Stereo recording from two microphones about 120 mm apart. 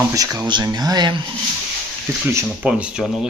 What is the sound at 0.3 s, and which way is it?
Speech, 35° right (ahead or behind).